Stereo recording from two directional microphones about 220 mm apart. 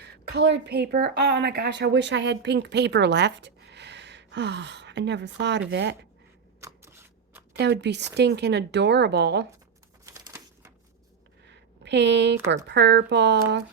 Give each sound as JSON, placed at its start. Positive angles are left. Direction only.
{"t": 0.0, "sound": "a woman's voice", "side_deg": -50}
{"t": 6.6, "sound": "shuffling cards", "side_deg": -15}
{"t": 7.6, "sound": "speech", "side_deg": -50}
{"t": 10.2, "sound": "crushing", "side_deg": -15}
{"t": 11.8, "sound": "speech", "side_deg": -50}